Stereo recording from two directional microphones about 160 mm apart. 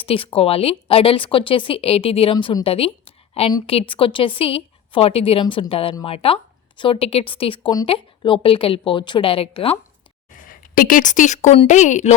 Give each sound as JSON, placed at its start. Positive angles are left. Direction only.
{"t": 0.0, "sound": "a woman's voice", "side_deg": 35}
{"t": 10.3, "sound": "a woman's voice", "side_deg": 60}